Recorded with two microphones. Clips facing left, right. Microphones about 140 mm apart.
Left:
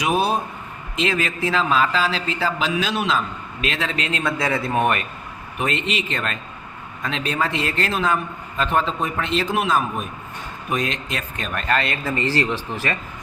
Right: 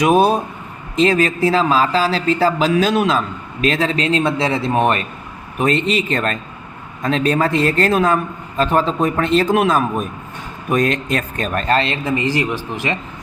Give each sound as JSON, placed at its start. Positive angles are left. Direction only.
{"t": 0.0, "sound": "a man's voice", "side_deg": -50}